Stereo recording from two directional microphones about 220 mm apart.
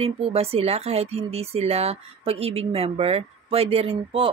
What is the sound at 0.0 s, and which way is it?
Speech, 25° right (ahead or behind).